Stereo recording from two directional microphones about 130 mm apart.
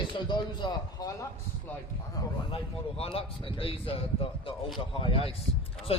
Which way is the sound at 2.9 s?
45° left (ahead or behind).